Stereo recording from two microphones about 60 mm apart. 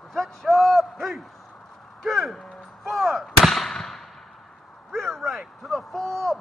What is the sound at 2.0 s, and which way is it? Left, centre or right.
Artillery fire, centre.